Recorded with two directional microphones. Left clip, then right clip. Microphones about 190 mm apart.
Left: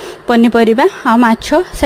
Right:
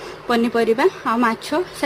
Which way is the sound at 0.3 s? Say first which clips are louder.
Left 8 dB; 40° left (ahead or behind).